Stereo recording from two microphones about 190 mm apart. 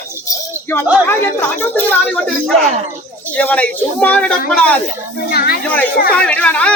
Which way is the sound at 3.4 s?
10° left (ahead or behind).